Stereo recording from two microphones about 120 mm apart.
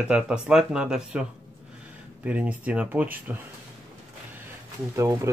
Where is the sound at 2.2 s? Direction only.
10° right (ahead or behind).